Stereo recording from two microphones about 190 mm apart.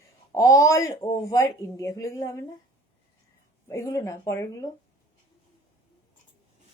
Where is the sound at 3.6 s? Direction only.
15° left (ahead or behind).